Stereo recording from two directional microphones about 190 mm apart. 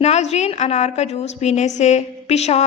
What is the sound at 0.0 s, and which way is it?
A woman's voice, 35° left (ahead or behind).